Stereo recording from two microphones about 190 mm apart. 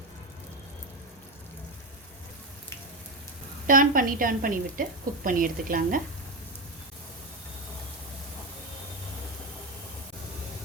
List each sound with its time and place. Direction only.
3.7 s a woman's voice: 45° right (ahead or behind)